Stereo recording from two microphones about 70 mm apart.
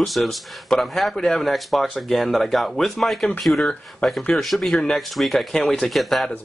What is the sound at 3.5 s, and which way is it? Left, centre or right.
Speech, left.